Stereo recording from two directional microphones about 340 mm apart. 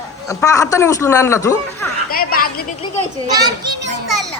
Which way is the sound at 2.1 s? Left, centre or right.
Left.